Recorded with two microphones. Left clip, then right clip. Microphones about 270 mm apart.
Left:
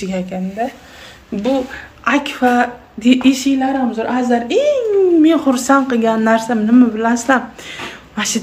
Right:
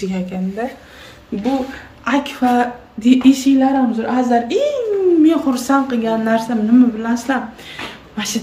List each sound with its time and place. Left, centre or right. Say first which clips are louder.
0.0 s a woman's voice: left 2 dB; centre
2.0 s a woman's voice: left 2 dB; centre